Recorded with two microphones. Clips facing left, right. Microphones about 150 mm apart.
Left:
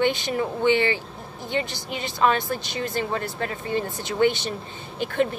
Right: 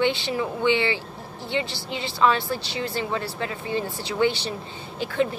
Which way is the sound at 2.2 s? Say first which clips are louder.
Even; 50° left (ahead or behind).